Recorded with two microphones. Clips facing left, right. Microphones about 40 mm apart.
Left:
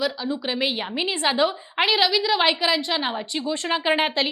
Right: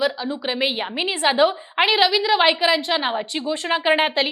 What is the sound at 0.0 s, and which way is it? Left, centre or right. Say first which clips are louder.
A woman's voice: right 3 dB; centre.